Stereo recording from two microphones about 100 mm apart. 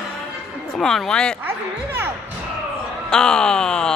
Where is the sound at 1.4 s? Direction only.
20° right (ahead or behind).